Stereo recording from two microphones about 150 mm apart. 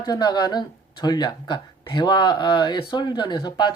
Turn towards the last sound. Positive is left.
turn(degrees=30)  # may be behind; listen again after turning